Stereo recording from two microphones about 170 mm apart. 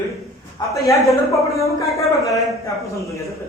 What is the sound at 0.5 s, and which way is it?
A man's voice, 20° left (ahead or behind).